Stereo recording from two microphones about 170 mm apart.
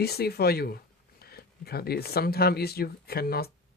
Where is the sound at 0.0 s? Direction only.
65° left (ahead or behind).